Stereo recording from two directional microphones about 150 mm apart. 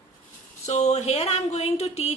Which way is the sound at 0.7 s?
50° left (ahead or behind).